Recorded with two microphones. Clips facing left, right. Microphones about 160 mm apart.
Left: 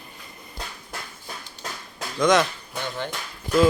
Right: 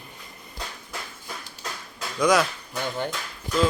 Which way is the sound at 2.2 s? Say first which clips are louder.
Left 1 dB; 5° right (ahead or behind).